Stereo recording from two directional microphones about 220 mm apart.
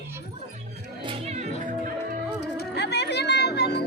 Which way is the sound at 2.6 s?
50° left (ahead or behind).